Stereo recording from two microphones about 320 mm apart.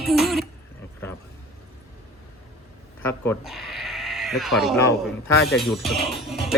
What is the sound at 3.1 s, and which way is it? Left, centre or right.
Speech, centre.